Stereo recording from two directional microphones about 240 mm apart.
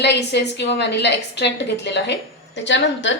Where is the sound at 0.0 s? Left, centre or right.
Left.